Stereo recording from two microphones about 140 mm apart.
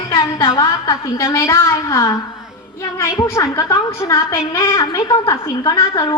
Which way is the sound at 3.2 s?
20° left (ahead or behind).